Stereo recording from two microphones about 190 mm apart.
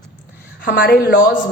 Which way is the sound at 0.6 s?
50° left (ahead or behind).